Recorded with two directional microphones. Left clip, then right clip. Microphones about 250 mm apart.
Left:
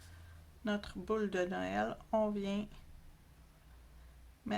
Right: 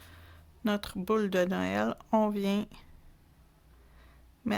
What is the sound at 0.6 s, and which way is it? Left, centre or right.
Speech, right.